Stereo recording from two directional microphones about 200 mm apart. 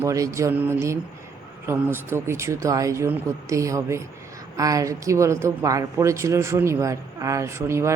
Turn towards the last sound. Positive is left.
turn(degrees=-15)  # may be behind; listen again after turning